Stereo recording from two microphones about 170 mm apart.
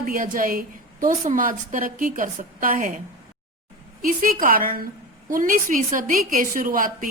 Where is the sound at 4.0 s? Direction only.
55° right (ahead or behind).